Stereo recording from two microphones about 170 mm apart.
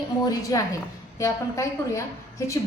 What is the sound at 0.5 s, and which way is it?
A woman's voice, 20° left (ahead or behind).